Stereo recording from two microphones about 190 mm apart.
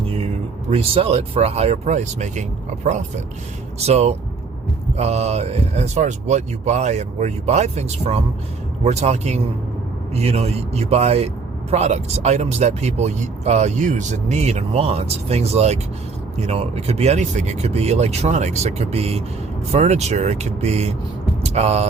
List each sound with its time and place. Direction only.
0.7 s speech: 30° right (ahead or behind)
21.4 s vehicle: 35° right (ahead or behind)